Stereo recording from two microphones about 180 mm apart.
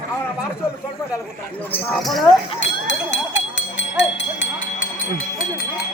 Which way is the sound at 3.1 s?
45° left (ahead or behind).